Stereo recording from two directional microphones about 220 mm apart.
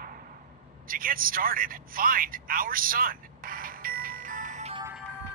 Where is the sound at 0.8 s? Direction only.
40° right (ahead or behind).